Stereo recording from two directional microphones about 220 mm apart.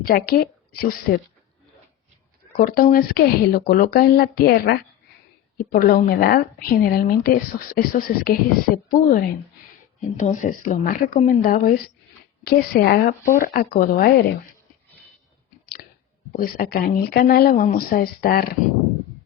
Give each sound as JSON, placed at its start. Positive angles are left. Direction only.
{"t": 0.0, "sound": "a woman's voice", "side_deg": 40}
{"t": 2.6, "sound": "a woman's voice", "side_deg": 40}
{"t": 16.3, "sound": "a woman's voice", "side_deg": 40}